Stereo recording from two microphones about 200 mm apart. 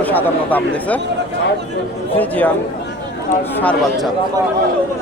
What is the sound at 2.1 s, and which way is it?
Speech, 10° left (ahead or behind).